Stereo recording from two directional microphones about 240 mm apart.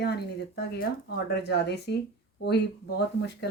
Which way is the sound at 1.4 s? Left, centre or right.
Left.